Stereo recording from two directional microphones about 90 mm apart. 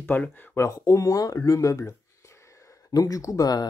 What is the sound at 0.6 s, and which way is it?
Speech, 35° left (ahead or behind).